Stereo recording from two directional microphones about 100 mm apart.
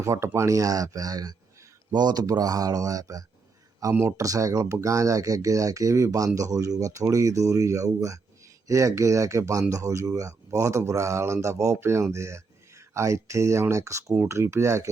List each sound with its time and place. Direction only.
0.0 s speech: 30° right (ahead or behind)